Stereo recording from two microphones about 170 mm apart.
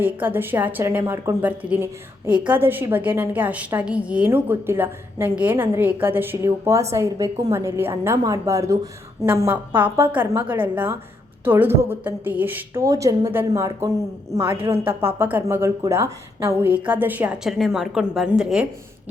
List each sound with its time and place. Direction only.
0.0 s a woman's voice: 10° right (ahead or behind)